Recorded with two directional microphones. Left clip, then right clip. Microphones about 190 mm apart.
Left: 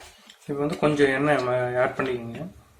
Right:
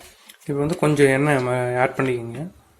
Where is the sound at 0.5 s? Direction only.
40° right (ahead or behind).